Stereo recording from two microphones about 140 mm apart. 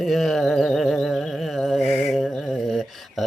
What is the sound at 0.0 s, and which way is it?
Music, centre (ahead or behind).